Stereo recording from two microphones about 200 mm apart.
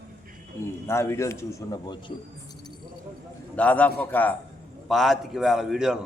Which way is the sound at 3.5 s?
5° left (ahead or behind).